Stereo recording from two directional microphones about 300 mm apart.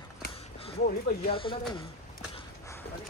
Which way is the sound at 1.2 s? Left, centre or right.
Centre.